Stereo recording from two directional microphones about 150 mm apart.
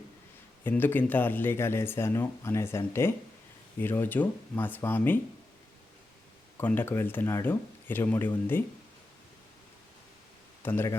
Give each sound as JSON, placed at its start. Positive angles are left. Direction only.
{"t": 0.6, "sound": "speech", "side_deg": 15}
{"t": 6.6, "sound": "speech", "side_deg": 15}
{"t": 10.6, "sound": "speech", "side_deg": 15}